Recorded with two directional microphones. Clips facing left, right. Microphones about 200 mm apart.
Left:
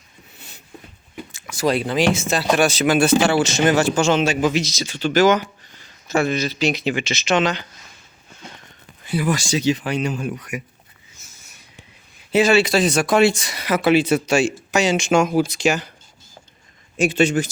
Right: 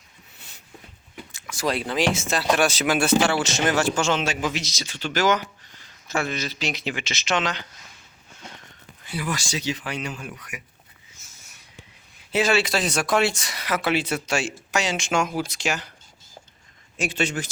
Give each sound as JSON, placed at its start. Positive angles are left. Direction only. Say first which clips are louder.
{"t": 1.5, "sound": "speech", "louder": "left 6 dB", "side_deg": 5}
{"t": 3.9, "sound": "speech", "louder": "left 6 dB", "side_deg": 10}
{"t": 6.2, "sound": "speech", "louder": "left 8 dB", "side_deg": 10}
{"t": 9.0, "sound": "speech", "louder": "left 8 dB", "side_deg": 15}
{"t": 9.8, "sound": "speech", "louder": "left 9 dB", "side_deg": 25}
{"t": 12.3, "sound": "speech", "louder": "left 6 dB", "side_deg": 0}
{"t": 17.0, "sound": "speech", "louder": "left 9 dB", "side_deg": 10}